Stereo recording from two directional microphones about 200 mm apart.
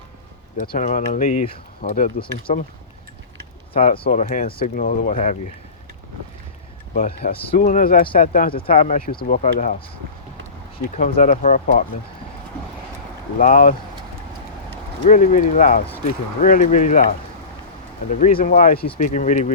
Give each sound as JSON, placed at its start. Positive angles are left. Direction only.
{"t": 0.6, "sound": "speech", "side_deg": 45}
{"t": 2.5, "sound": "speech", "side_deg": 35}
{"t": 3.8, "sound": "speech", "side_deg": 30}
{"t": 4.1, "sound": "speech", "side_deg": 45}
{"t": 6.9, "sound": "speech", "side_deg": 45}
{"t": 8.6, "sound": "speech", "side_deg": 30}
{"t": 10.8, "sound": "speech", "side_deg": 40}
{"t": 13.4, "sound": "speech", "side_deg": 40}
{"t": 15.0, "sound": "speech", "side_deg": 40}